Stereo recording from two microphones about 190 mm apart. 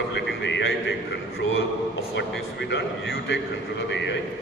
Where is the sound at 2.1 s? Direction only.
65° left (ahead or behind).